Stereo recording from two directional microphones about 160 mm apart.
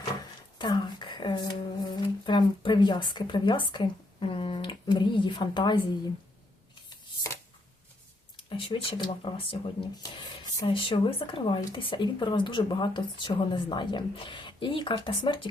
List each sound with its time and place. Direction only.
0.6 s a sound: 30° left (ahead or behind)
6.9 s shuffling cards: 20° left (ahead or behind)
8.4 s speech: 35° left (ahead or behind)